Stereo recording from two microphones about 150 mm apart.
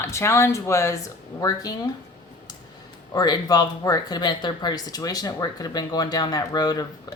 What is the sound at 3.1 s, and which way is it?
Speech, 25° left (ahead or behind).